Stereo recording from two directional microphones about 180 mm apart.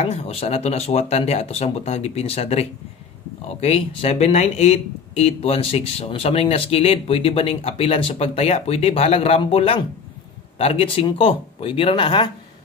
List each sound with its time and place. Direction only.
0.0 s speech: 35° left (ahead or behind)